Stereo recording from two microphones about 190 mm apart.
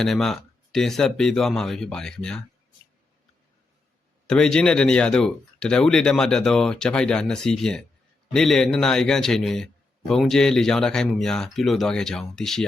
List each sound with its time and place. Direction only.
0.0 s speech: centre (ahead or behind)
4.3 s speech: 5° left (ahead or behind)